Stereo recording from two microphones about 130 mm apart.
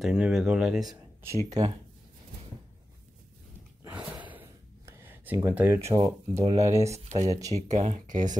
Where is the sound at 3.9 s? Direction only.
10° right (ahead or behind).